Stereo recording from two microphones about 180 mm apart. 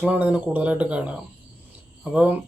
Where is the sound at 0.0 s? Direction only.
10° right (ahead or behind).